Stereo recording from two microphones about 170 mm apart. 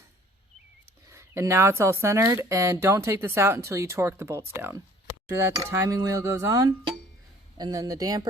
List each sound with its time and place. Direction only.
1.1 s speech: 15° right (ahead or behind)